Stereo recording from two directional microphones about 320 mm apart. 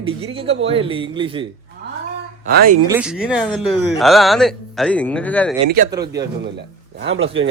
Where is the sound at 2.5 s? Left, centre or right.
Right.